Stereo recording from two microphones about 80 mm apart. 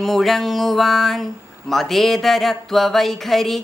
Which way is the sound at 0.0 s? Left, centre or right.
Centre.